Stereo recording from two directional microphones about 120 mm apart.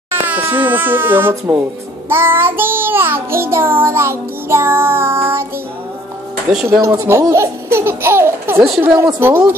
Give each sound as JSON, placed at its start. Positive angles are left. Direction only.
{"t": 0.1, "sound": "speech", "side_deg": -15}
{"t": 2.0, "sound": "child singing", "side_deg": -20}
{"t": 6.5, "sound": "speech", "side_deg": 0}
{"t": 6.8, "sound": "speech", "side_deg": -25}
{"t": 8.8, "sound": "child singing", "side_deg": -20}